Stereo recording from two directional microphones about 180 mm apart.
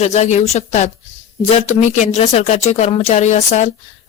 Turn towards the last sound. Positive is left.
turn(degrees=40)  # may be behind; listen again after turning